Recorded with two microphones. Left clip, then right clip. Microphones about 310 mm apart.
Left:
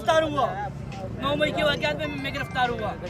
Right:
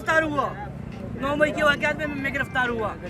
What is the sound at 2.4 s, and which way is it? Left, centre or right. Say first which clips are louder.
Speech: even; centre.